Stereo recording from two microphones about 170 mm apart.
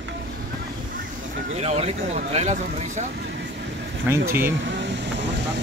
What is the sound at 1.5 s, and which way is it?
Speech, 40° right (ahead or behind).